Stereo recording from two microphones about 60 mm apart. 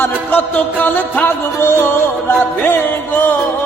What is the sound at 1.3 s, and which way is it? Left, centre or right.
Music, left.